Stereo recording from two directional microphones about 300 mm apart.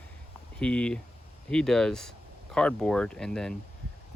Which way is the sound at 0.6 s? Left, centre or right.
Centre.